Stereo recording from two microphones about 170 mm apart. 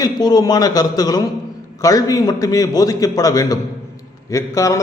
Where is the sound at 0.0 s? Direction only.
25° left (ahead or behind).